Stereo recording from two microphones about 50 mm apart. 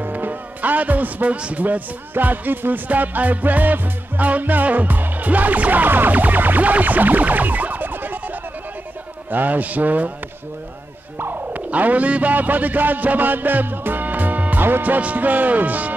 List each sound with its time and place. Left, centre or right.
0.0 s a man's voice: right
9.3 s music: right
11.1 s music: right
11.7 s music: right